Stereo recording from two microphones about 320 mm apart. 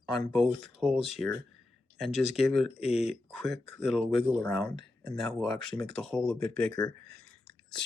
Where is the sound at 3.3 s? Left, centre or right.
Centre.